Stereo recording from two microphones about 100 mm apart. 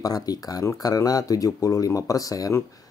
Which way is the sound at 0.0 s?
40° left (ahead or behind).